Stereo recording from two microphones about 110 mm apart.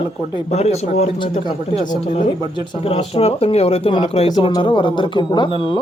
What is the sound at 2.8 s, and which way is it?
Speech, 65° left (ahead or behind).